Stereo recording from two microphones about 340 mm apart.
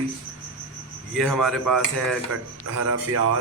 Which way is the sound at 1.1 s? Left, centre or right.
Centre.